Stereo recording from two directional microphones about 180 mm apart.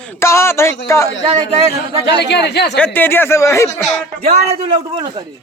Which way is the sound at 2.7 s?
10° left (ahead or behind).